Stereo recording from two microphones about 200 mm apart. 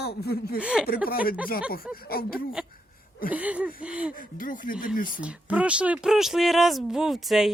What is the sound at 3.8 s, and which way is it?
Speech, 5° right (ahead or behind).